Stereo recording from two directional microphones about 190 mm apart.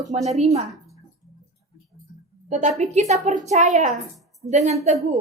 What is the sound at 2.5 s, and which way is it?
Speech, 40° right (ahead or behind).